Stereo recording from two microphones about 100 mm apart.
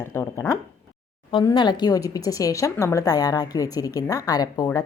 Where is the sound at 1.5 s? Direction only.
50° left (ahead or behind).